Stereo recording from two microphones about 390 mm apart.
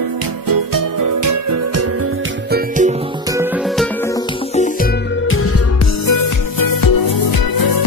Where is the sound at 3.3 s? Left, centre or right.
Centre.